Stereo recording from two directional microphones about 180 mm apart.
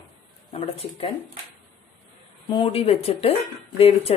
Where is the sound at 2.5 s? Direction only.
30° left (ahead or behind).